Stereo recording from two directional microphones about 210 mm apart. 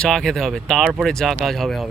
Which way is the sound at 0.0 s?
Centre (ahead or behind).